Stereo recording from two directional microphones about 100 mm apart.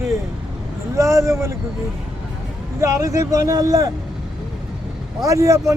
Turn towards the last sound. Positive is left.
turn(degrees=-30)  # may be behind; listen again after turning